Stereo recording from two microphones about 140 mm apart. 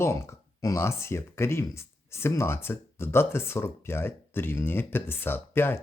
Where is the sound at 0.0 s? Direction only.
20° left (ahead or behind).